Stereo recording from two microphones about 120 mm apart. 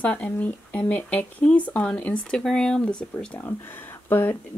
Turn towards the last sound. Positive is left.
turn(degrees=15)  # may be behind; listen again after turning